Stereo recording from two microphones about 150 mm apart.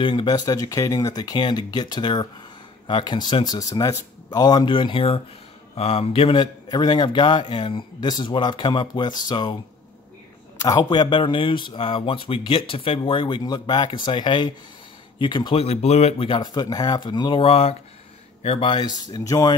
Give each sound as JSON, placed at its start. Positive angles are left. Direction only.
{"t": 0.0, "sound": "a man's voice", "side_deg": 30}
{"t": 10.6, "sound": "a man's voice", "side_deg": 25}